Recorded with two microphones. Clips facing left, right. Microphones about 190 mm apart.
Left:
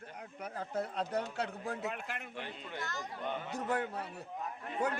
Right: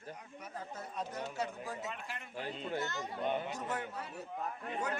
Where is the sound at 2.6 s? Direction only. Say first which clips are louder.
Right 4 dB; 25° right (ahead or behind).